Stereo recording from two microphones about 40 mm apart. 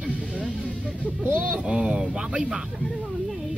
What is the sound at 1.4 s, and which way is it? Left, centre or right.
Speech, right.